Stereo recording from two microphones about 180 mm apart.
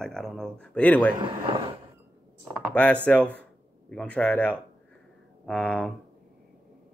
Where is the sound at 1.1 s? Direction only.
25° right (ahead or behind).